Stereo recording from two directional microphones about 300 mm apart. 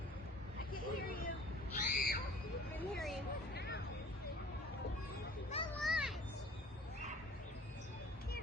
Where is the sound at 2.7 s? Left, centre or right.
Centre.